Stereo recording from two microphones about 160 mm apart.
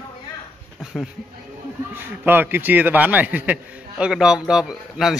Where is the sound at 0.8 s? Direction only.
Centre (ahead or behind).